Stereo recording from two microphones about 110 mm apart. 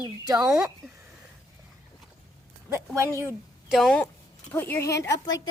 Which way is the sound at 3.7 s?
Centre (ahead or behind).